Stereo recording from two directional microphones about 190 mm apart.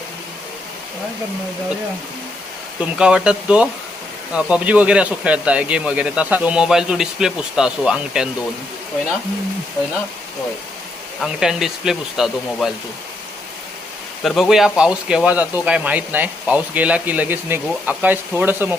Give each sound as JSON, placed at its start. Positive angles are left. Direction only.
{"t": 3.0, "sound": "a man's voice", "side_deg": -5}
{"t": 11.2, "sound": "a man's voice", "side_deg": 0}
{"t": 14.3, "sound": "a man's voice", "side_deg": 0}